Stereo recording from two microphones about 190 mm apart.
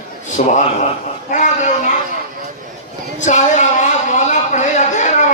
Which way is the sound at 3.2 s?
40° left (ahead or behind).